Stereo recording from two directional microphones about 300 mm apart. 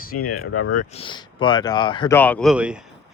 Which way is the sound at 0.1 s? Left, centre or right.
Left.